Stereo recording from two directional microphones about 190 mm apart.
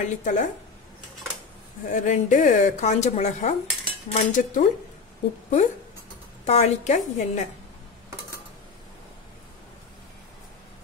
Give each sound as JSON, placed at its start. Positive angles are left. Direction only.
{"t": 0.0, "sound": "speech", "side_deg": 40}
{"t": 1.9, "sound": "speech", "side_deg": 40}
{"t": 6.4, "sound": "speech", "side_deg": 35}